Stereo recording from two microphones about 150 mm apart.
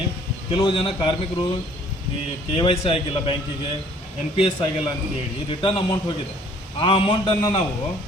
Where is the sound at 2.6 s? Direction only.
35° left (ahead or behind).